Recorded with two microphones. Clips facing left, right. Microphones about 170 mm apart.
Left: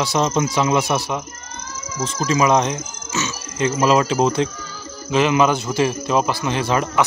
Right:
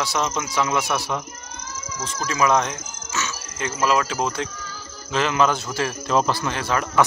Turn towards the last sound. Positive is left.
turn(degrees=20)  # may be behind; listen again after turning